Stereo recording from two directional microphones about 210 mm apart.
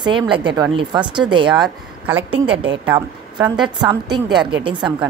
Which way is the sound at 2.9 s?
20° right (ahead or behind).